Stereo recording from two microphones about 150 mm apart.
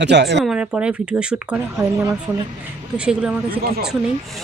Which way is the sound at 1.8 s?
20° right (ahead or behind).